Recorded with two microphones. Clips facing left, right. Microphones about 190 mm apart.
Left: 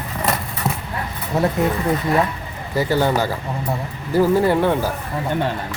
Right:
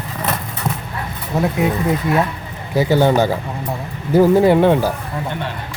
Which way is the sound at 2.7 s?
15° right (ahead or behind).